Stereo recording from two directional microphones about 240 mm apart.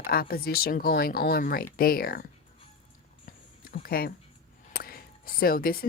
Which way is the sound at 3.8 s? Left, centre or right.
Left.